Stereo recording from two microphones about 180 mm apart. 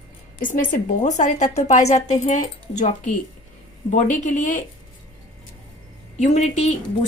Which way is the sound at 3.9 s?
40° left (ahead or behind).